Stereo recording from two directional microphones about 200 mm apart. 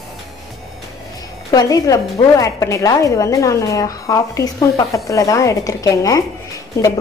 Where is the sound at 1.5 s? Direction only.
20° left (ahead or behind).